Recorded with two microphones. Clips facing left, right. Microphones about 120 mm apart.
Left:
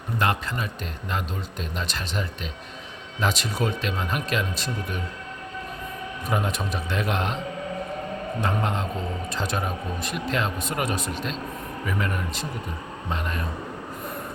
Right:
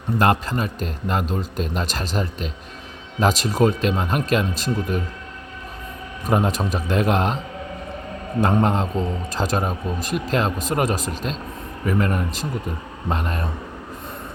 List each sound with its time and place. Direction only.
0.2 s speech: 40° right (ahead or behind)
6.2 s speech: 40° right (ahead or behind)
8.4 s speech: 40° right (ahead or behind)